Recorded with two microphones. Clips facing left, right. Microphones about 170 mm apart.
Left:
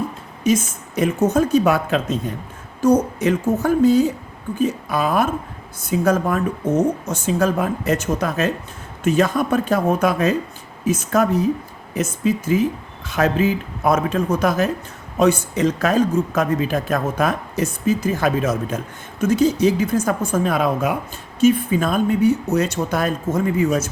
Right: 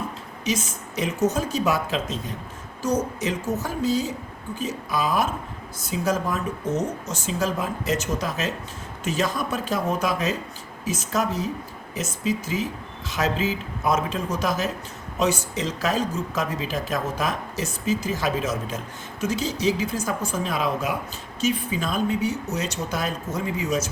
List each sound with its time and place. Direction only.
0.4 s speech: 50° left (ahead or behind)